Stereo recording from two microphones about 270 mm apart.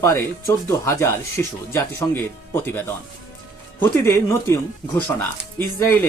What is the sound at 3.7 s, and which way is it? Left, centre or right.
Speech, centre.